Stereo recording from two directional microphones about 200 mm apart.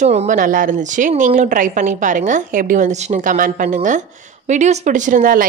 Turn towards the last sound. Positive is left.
turn(degrees=-45)  # may be behind; listen again after turning